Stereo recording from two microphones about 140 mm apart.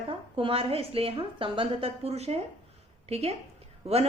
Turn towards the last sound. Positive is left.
turn(degrees=-50)  # may be behind; listen again after turning